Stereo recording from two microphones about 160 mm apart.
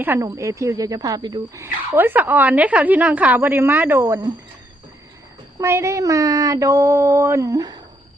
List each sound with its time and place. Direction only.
0.0 s speech: 15° right (ahead or behind)
5.5 s speech: 15° right (ahead or behind)